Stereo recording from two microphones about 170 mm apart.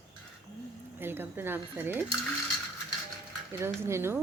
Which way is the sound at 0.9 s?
10° right (ahead or behind).